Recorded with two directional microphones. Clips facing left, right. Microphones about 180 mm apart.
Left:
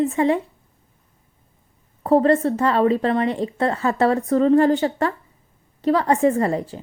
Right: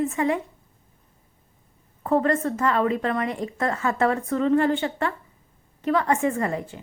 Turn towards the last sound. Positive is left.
turn(degrees=35)  # may be behind; listen again after turning